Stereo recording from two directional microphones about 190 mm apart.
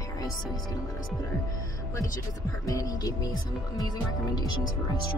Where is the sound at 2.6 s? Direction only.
20° left (ahead or behind).